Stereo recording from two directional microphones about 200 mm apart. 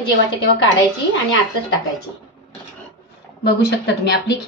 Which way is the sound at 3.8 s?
55° left (ahead or behind).